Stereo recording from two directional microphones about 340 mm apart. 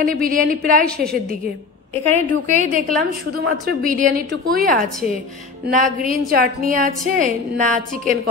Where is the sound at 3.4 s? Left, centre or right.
Right.